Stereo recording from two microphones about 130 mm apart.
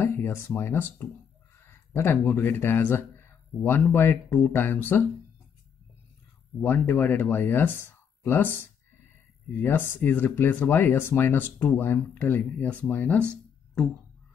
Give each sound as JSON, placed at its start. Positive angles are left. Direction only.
{"t": 0.0, "sound": "speech", "side_deg": 20}
{"t": 6.6, "sound": "speech", "side_deg": 15}